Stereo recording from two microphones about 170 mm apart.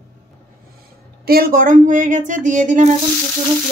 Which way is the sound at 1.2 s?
60° right (ahead or behind).